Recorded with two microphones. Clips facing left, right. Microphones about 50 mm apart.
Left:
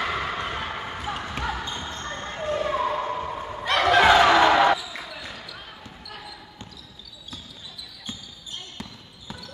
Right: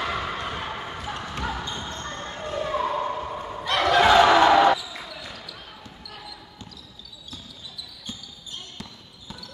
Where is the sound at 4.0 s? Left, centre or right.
Centre.